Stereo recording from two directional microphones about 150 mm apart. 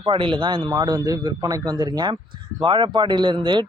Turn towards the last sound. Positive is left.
turn(degrees=-30)  # may be behind; listen again after turning